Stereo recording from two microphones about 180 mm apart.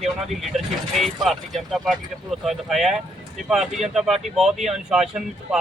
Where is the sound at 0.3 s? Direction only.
Centre (ahead or behind).